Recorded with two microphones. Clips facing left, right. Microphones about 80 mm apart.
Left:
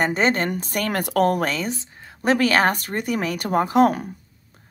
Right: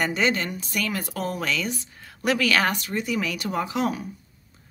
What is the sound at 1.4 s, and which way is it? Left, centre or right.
Speech, left.